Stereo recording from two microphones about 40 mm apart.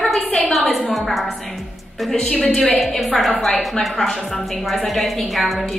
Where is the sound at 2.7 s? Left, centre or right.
Centre.